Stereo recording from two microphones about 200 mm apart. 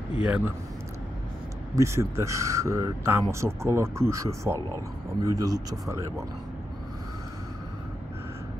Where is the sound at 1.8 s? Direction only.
15° right (ahead or behind).